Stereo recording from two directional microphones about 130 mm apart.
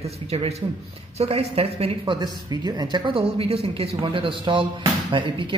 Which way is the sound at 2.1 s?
30° right (ahead or behind).